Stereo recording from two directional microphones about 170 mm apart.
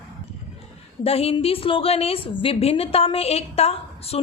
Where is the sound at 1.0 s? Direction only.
35° left (ahead or behind).